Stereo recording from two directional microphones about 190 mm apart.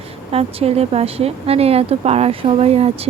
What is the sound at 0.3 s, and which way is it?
Speech, 30° right (ahead or behind).